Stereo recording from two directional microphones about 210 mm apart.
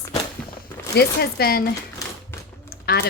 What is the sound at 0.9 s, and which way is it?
Speech, 50° left (ahead or behind).